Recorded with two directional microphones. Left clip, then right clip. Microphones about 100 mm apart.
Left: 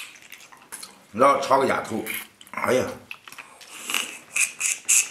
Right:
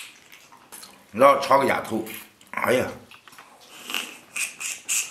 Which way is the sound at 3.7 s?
15° left (ahead or behind).